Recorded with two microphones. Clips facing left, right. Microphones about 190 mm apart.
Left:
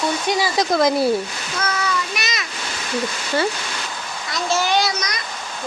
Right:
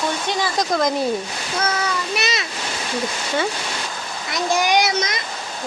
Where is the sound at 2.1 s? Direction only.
30° right (ahead or behind).